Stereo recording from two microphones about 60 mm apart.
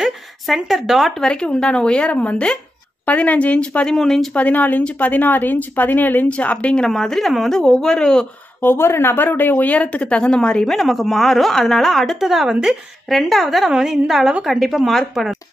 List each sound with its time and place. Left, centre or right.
0.7 s a woman's voice: centre
1.2 s speech: centre
4.0 s a woman's voice: centre
4.3 s speech: left
6.9 s speech: centre
8.5 s a woman's voice: left; by 15.3 s centre